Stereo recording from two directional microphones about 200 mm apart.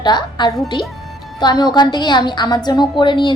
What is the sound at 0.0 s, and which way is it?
A woman's voice, 20° left (ahead or behind).